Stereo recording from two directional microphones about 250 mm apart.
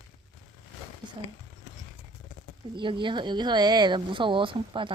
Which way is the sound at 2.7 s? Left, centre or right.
Centre.